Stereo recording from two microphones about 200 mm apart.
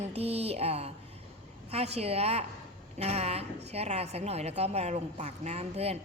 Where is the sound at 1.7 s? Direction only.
30° right (ahead or behind).